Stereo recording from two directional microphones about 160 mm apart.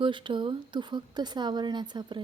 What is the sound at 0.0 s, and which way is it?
A woman's voice, 30° right (ahead or behind).